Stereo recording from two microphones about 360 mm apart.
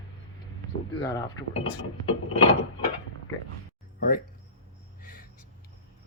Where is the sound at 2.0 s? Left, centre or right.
Centre.